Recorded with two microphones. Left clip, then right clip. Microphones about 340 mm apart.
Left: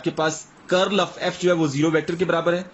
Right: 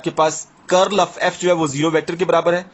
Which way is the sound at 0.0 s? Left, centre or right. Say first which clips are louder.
Right 6 dB; centre.